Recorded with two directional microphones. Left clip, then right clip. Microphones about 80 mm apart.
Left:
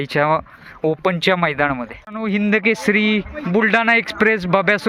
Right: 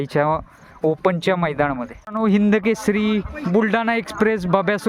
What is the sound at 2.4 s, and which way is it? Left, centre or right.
Speech, right.